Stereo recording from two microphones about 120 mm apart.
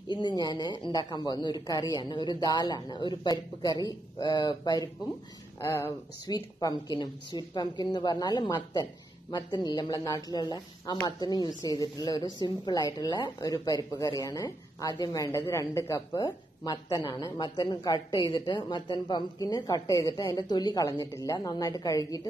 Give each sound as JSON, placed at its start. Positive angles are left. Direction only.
{"t": 0.1, "sound": "speech", "side_deg": 40}
{"t": 5.6, "sound": "speech", "side_deg": 20}
{"t": 6.2, "sound": "speech", "side_deg": 35}